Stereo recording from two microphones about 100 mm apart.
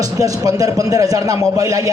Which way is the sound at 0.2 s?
35° right (ahead or behind).